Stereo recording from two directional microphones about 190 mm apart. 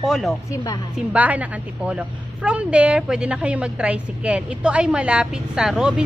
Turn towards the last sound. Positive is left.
turn(degrees=-5)  # may be behind; listen again after turning